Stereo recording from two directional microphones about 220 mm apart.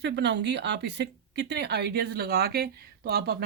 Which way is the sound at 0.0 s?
50° right (ahead or behind).